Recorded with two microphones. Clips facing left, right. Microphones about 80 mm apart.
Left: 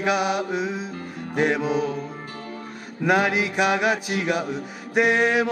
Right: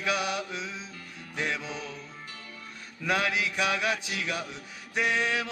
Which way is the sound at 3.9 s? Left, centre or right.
Left.